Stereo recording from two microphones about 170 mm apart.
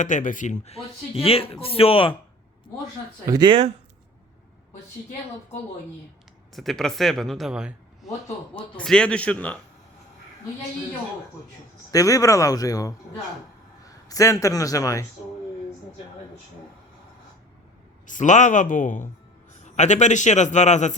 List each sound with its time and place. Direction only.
0.0 s speech: 50° left (ahead or behind)
3.2 s speech: 25° right (ahead or behind)
6.5 s a man's voice: centre (ahead or behind)
11.9 s speech: 20° left (ahead or behind)
14.1 s speech: 20° left (ahead or behind)
18.0 s a man's voice: 45° left (ahead or behind)